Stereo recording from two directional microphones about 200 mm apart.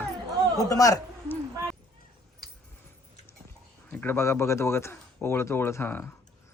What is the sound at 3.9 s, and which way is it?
Speech, 10° left (ahead or behind).